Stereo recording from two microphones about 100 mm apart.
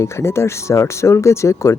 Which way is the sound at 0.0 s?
30° left (ahead or behind).